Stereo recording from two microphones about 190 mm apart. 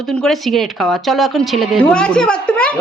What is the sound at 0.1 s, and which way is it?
A woman's voice, centre (ahead or behind).